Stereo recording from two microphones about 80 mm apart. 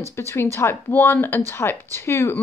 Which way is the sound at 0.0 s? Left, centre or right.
Left.